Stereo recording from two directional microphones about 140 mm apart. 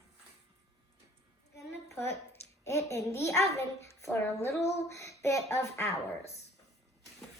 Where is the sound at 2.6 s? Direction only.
20° left (ahead or behind).